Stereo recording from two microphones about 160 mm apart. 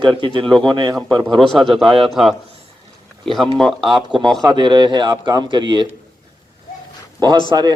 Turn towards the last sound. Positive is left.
turn(degrees=-25)  # may be behind; listen again after turning